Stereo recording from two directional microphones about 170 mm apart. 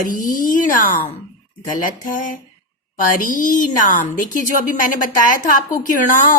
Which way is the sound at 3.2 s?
50° left (ahead or behind).